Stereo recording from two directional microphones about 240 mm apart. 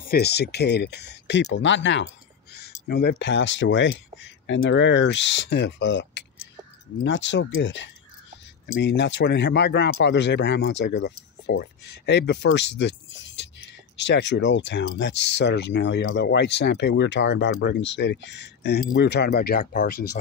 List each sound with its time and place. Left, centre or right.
0.0 s speech: left